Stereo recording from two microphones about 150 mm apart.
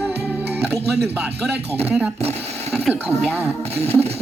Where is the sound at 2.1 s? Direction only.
45° right (ahead or behind).